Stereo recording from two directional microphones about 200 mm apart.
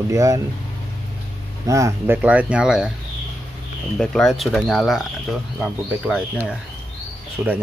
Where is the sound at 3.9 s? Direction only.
5° left (ahead or behind).